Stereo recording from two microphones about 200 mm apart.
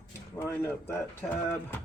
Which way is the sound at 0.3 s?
10° left (ahead or behind).